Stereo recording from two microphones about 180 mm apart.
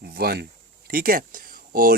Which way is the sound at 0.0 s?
60° right (ahead or behind).